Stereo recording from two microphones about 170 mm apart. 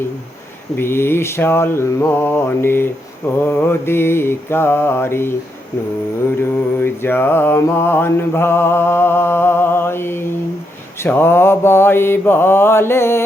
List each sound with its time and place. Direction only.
0.8 s mantra: 15° left (ahead or behind)